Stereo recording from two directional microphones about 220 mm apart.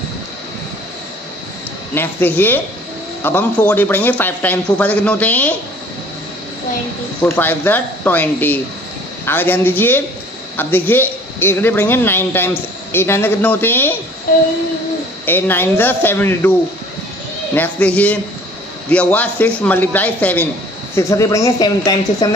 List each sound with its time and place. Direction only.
2.0 s speech: 10° left (ahead or behind)
7.2 s speech: 10° left (ahead or behind)
15.2 s speech: 10° left (ahead or behind)
17.6 s speech: 5° left (ahead or behind)